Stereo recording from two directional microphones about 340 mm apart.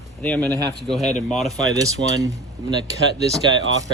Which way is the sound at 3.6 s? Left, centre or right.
Right.